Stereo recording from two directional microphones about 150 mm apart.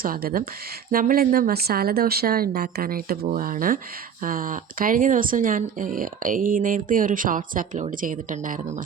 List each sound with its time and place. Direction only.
0.0 s speech: 75° right (ahead or behind)